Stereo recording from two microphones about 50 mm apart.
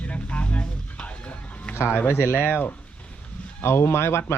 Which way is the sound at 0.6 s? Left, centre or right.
Left.